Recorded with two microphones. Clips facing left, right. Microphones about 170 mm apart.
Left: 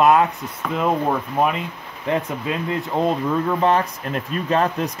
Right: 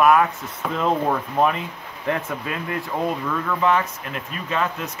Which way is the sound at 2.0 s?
20° left (ahead or behind).